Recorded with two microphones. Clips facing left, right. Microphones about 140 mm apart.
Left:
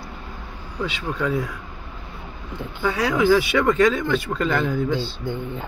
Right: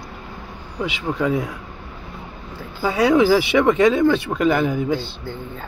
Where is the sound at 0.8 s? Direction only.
20° right (ahead or behind).